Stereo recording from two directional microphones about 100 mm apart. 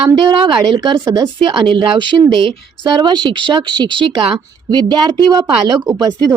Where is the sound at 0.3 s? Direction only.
55° right (ahead or behind).